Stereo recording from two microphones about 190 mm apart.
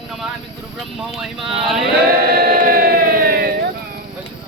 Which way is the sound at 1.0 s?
Centre (ahead or behind).